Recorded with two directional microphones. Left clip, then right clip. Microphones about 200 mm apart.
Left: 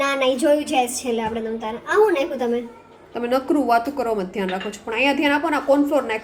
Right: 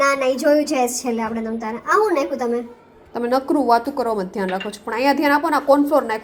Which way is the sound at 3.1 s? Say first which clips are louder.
Right 1 dB; 10° right (ahead or behind).